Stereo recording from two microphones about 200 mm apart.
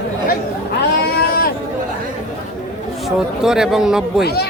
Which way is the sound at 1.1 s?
50° left (ahead or behind).